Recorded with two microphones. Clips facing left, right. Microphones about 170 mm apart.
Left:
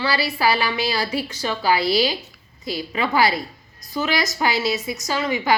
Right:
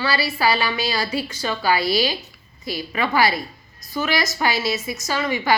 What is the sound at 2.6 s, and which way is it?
A woman's voice, 20° left (ahead or behind).